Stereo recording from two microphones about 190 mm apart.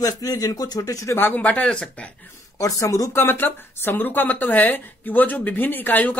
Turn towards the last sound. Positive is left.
turn(degrees=10)  # may be behind; listen again after turning